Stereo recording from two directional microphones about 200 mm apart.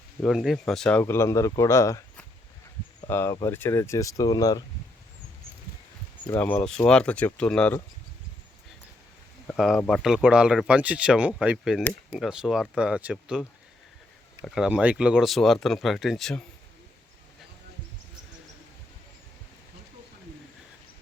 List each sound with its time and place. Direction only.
0.2 s speech: centre (ahead or behind); by 4.6 s 20° left (ahead or behind)
6.2 s speech: 10° left (ahead or behind)
9.5 s speech: centre (ahead or behind)